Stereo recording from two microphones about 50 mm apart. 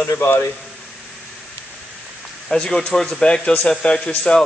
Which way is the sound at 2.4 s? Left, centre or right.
Centre.